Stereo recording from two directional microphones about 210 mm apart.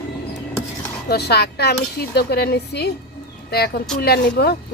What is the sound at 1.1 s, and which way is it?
Speech, 50° left (ahead or behind).